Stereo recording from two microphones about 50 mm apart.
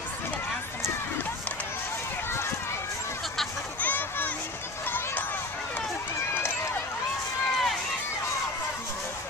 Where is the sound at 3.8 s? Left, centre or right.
Left.